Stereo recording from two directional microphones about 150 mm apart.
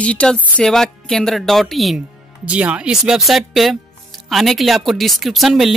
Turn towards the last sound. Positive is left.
turn(degrees=0)  # may be behind; listen again after turning